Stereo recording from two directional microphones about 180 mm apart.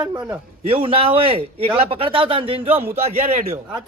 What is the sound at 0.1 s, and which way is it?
Speech, 10° right (ahead or behind).